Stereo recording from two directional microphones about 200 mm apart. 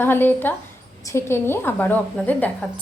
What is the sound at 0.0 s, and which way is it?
A woman's voice, 10° left (ahead or behind).